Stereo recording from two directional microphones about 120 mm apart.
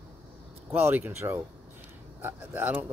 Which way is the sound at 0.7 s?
15° right (ahead or behind).